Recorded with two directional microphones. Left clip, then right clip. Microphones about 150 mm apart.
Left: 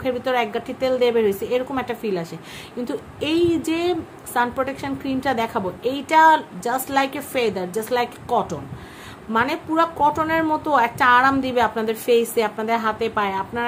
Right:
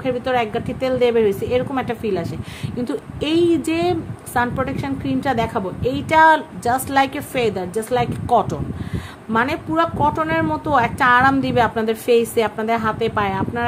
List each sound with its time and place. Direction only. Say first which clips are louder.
0.0 s a woman's voice: right 2 dB; 10° right (ahead or behind)
8.3 s a woman's voice: right 5 dB; 25° right (ahead or behind)